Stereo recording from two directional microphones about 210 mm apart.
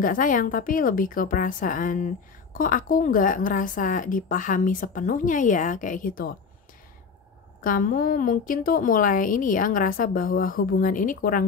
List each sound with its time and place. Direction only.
0.0 s a woman's voice: 40° left (ahead or behind)
7.6 s a woman's voice: 40° left (ahead or behind)